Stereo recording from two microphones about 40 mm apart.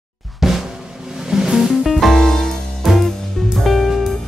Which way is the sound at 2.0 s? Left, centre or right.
Centre.